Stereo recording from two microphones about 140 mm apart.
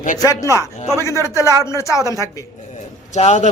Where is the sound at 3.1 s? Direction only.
55° left (ahead or behind).